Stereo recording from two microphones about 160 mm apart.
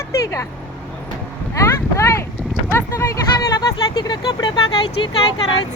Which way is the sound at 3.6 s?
25° left (ahead or behind).